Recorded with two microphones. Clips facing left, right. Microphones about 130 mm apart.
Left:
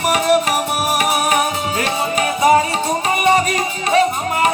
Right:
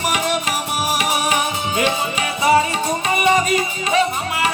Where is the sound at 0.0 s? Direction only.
40° left (ahead or behind).